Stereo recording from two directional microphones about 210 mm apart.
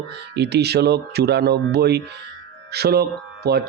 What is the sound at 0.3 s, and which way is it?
Mantra, 55° right (ahead or behind).